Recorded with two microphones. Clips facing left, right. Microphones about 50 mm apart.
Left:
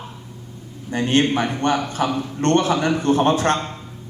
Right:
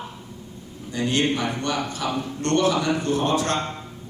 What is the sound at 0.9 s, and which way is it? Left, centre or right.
A man's voice, left.